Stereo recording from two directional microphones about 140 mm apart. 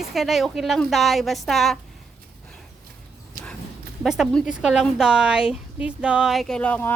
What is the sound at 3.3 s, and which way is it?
Horse, 80° right.